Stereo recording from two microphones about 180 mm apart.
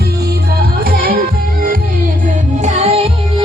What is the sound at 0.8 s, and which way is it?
Music, 55° right (ahead or behind).